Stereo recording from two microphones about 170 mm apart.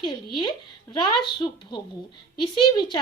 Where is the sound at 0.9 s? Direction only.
25° left (ahead or behind).